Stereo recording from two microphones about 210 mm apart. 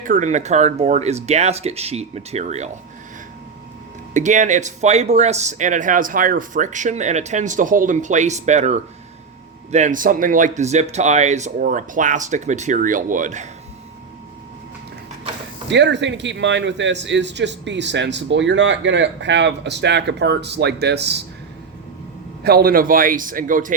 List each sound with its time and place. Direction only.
0.0 s speech: 35° right (ahead or behind)
4.1 s speech: 35° right (ahead or behind)
15.7 s a man's voice: 55° right (ahead or behind)
22.4 s speech: 45° right (ahead or behind)